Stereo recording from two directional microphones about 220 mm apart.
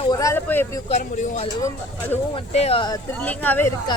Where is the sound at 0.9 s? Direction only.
35° left (ahead or behind).